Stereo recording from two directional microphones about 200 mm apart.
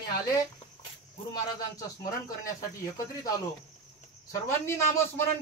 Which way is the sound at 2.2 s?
15° left (ahead or behind).